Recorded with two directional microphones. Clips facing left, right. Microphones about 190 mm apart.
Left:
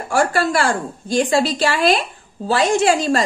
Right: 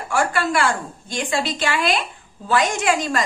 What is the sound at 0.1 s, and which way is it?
A woman's voice, 35° left (ahead or behind).